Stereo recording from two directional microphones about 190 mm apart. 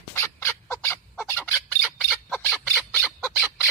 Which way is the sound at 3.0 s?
5° right (ahead or behind).